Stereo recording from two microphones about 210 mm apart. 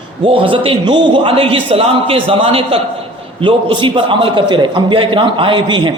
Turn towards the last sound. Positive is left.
turn(degrees=-20)  # may be behind; listen again after turning